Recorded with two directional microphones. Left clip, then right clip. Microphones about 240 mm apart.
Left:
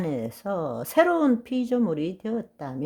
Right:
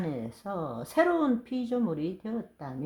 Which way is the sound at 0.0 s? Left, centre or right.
Left.